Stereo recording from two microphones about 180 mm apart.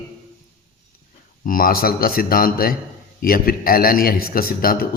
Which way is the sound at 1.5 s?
55° left (ahead or behind).